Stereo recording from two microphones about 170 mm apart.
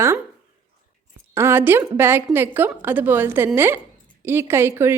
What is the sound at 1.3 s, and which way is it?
A woman's voice, 15° right (ahead or behind).